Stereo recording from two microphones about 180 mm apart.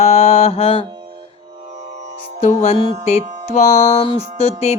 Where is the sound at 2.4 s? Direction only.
40° left (ahead or behind).